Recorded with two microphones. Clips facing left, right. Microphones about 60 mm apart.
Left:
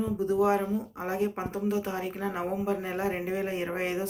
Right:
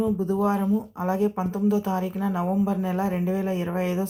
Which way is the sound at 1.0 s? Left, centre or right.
Left.